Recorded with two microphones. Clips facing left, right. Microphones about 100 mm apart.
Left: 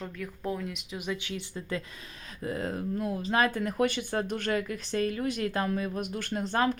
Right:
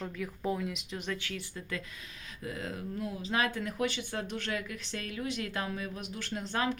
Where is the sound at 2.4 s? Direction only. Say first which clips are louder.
Left 6 dB; 40° left (ahead or behind).